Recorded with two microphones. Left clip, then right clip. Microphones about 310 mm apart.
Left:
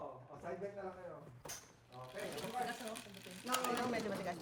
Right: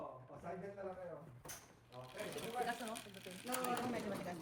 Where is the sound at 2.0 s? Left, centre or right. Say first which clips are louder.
Left 2 dB; centre.